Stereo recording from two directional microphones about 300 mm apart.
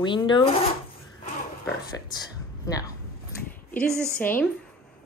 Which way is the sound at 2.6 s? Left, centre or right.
Centre.